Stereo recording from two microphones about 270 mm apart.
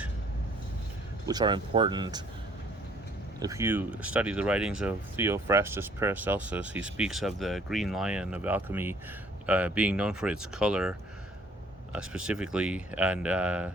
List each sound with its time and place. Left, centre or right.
1.3 s speech: centre
3.4 s speech: centre